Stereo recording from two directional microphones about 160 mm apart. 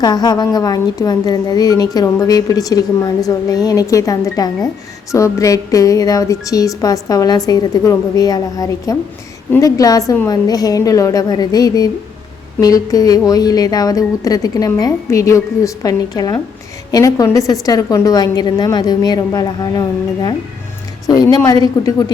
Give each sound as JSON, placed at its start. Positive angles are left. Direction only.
{"t": 0.0, "sound": "a woman's voice", "side_deg": 25}
{"t": 21.1, "sound": "a woman's voice", "side_deg": 20}